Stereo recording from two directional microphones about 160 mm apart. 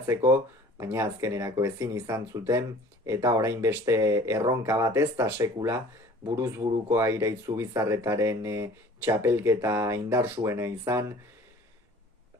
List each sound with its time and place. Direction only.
0.0 s speech: 15° right (ahead or behind)